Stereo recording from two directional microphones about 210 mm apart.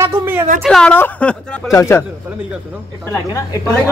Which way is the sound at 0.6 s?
5° left (ahead or behind).